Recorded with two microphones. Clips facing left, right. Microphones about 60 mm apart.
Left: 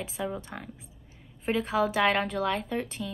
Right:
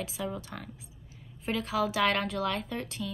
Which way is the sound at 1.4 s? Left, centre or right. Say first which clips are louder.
Left 3 dB; left.